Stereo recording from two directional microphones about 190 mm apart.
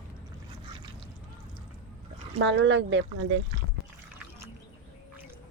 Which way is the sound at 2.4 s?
75° right (ahead or behind).